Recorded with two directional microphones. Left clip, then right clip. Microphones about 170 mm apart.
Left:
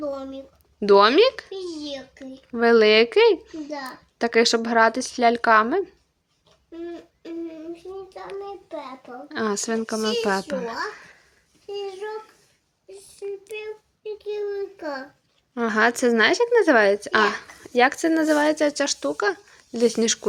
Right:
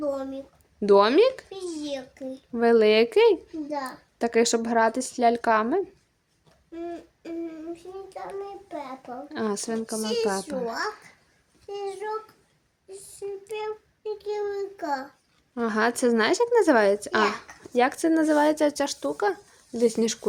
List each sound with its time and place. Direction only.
0.0 s a sound: 20° right (ahead or behind)
0.8 s speech: 5° right (ahead or behind)
1.5 s a sound: 25° right (ahead or behind)
2.5 s speech: centre (ahead or behind)
9.3 s speech: centre (ahead or behind)
9.7 s speech: 15° left (ahead or behind)
11.8 s a child's voice: 20° right (ahead or behind)
14.0 s a child's voice: 25° right (ahead or behind)
15.5 s speech: centre (ahead or behind)